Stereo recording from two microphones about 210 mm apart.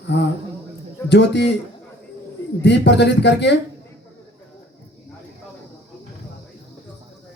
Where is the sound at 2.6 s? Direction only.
55° left (ahead or behind).